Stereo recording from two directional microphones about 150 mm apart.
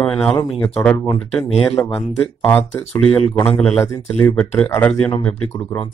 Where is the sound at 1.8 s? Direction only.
10° left (ahead or behind).